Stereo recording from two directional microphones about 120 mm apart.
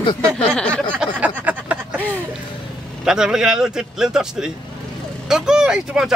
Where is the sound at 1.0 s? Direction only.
10° right (ahead or behind).